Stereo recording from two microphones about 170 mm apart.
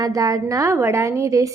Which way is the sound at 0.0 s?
20° right (ahead or behind).